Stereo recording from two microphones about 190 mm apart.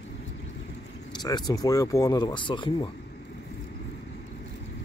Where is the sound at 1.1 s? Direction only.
20° left (ahead or behind).